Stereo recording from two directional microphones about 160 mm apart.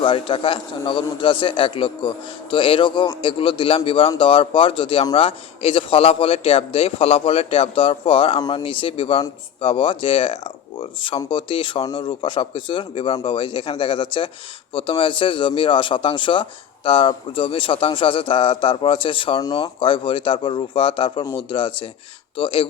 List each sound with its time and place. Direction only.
0.0 s speech: 30° left (ahead or behind)